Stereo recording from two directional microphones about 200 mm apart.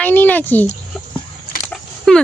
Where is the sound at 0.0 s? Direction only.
10° left (ahead or behind).